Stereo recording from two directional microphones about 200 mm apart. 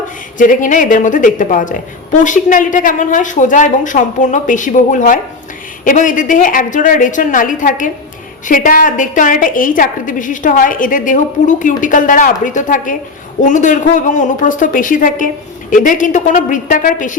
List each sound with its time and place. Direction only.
0.3 s a woman's voice: 40° left (ahead or behind)